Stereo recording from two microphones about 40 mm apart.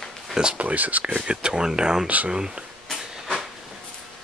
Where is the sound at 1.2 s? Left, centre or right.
Right.